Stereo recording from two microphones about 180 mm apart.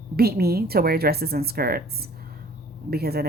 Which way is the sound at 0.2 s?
60° right (ahead or behind).